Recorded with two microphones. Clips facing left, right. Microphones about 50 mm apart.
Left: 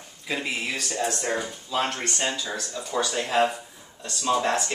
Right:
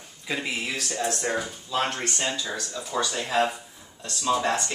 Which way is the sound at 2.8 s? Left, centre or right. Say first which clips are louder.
Left 1 dB; left.